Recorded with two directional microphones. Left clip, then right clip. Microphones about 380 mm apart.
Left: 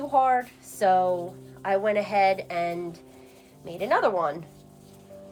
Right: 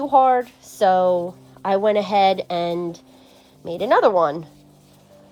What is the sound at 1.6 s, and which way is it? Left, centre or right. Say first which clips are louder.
Speech: right 6 dB; right.